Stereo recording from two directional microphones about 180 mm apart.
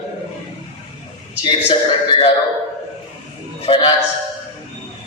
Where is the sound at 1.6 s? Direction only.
30° left (ahead or behind).